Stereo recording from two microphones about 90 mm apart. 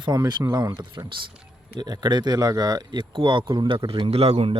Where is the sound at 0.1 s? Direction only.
45° right (ahead or behind).